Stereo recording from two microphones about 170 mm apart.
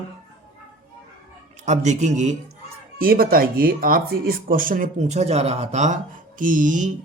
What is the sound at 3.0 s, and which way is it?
A man's voice, 60° right (ahead or behind).